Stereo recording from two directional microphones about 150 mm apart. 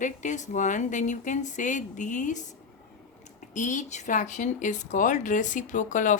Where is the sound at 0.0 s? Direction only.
55° left (ahead or behind).